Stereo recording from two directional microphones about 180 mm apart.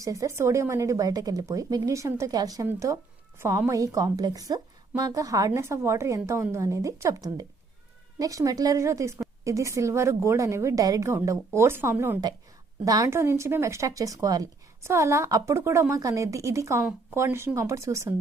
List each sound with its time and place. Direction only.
0.0 s speech: 20° right (ahead or behind)